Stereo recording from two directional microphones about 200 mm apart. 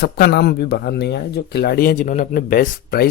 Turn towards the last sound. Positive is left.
turn(degrees=50)  # may be behind; listen again after turning